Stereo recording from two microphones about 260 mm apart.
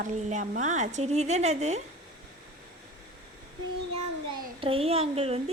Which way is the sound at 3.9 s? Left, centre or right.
Centre.